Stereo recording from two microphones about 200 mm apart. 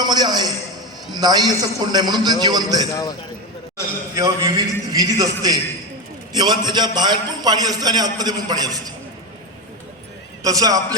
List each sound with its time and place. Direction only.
0.0 s a man's voice: 20° right (ahead or behind)
2.9 s speech: 20° left (ahead or behind)
4.1 s a man's voice: 20° right (ahead or behind)
10.4 s a man's voice: 15° right (ahead or behind)